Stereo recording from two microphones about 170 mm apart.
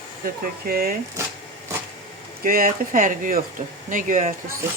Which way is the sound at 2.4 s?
55° right (ahead or behind).